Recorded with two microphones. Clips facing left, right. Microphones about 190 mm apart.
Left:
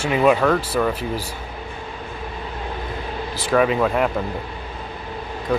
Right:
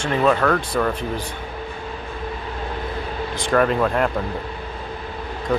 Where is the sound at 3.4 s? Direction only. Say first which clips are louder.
Left 1 dB; 5° left (ahead or behind).